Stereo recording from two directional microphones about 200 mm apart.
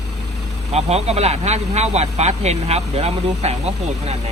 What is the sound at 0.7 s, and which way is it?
Speech, 30° right (ahead or behind).